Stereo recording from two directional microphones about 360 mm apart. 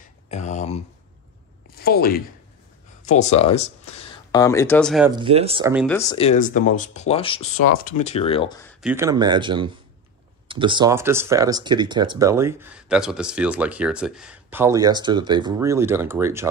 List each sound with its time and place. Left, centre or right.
0.3 s speech: centre
1.8 s speech: left; by 5.1 s centre
5.1 s speech: centre
5.9 s speech: centre
8.8 s speech: centre